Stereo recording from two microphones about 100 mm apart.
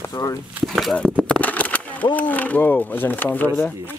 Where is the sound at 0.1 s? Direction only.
35° left (ahead or behind).